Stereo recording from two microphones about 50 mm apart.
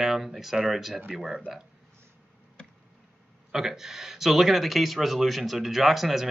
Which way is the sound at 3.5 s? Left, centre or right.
Centre.